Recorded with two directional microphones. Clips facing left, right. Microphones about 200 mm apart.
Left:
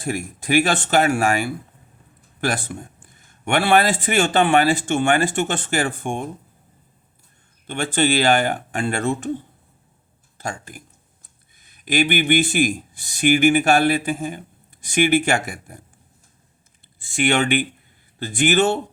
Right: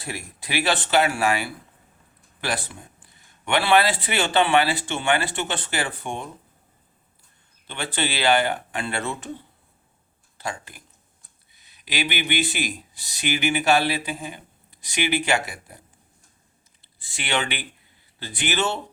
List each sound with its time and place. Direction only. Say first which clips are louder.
0.0 s speech: left 9 dB; 45° left (ahead or behind)
7.7 s speech: left 8 dB; 45° left (ahead or behind)
17.0 s speech: left 8 dB; 50° left (ahead or behind)